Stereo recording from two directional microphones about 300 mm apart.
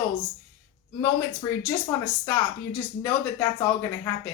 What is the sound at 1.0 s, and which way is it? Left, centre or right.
Speech, centre.